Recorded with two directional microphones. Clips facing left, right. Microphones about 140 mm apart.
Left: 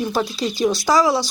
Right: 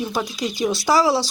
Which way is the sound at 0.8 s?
30° right (ahead or behind).